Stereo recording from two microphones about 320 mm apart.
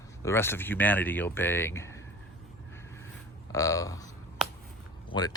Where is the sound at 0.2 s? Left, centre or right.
Centre.